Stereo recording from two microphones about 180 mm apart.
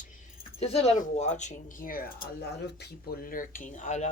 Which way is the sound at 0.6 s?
35° left (ahead or behind).